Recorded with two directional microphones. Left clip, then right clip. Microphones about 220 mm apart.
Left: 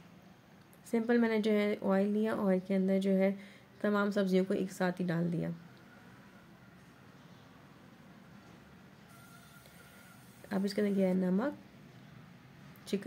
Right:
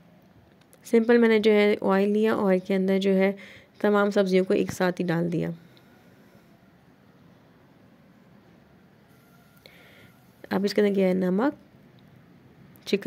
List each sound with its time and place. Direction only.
0.8 s speech: 40° right (ahead or behind)
10.5 s speech: 45° right (ahead or behind)
12.9 s a woman's voice: 40° right (ahead or behind)